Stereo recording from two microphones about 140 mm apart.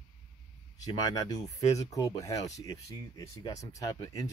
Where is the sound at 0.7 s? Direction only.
25° left (ahead or behind).